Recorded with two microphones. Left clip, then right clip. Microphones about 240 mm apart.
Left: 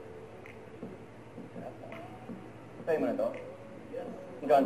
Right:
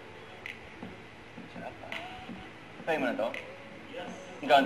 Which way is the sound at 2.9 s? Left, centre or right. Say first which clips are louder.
Even; centre.